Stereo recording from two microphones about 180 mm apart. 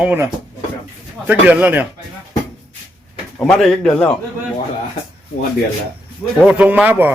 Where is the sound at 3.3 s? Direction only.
5° left (ahead or behind).